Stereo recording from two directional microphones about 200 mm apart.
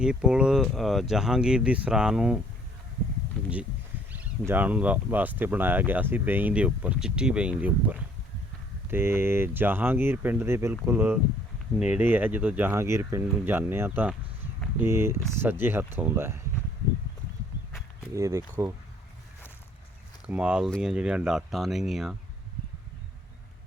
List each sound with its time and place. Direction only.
0.0 s speech: 5° right (ahead or behind)
4.1 s speech: 10° right (ahead or behind)
18.1 s speech: 15° right (ahead or behind)
20.2 s speech: 5° right (ahead or behind)